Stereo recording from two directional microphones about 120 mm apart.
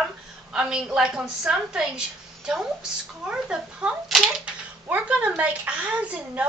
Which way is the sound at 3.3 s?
10° right (ahead or behind).